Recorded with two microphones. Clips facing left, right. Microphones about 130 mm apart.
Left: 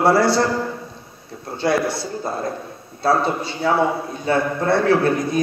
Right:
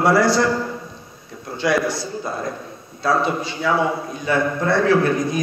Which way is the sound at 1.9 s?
30° left (ahead or behind).